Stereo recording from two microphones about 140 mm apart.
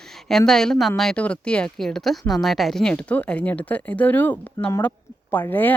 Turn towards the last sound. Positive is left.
turn(degrees=15)  # may be behind; listen again after turning